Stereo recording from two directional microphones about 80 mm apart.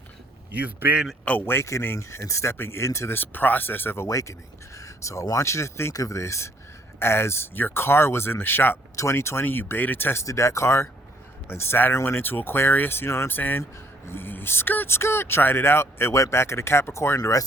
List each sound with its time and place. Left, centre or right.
0.5 s a man's voice: centre
1.2 s speech: centre
1.5 s speech: left
3.2 s speech: left
10.2 s speech: left